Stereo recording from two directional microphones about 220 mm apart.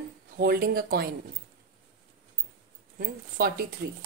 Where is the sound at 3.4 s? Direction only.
40° right (ahead or behind).